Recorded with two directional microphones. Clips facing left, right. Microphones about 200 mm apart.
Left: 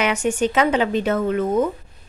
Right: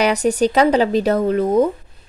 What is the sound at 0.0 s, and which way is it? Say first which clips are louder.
A woman's voice: right 4 dB; 35° right (ahead or behind).